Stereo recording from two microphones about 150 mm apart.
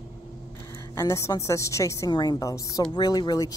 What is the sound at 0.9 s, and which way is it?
Speech, 20° left (ahead or behind).